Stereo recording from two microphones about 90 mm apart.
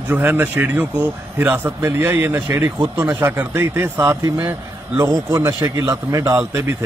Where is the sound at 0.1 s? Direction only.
20° right (ahead or behind).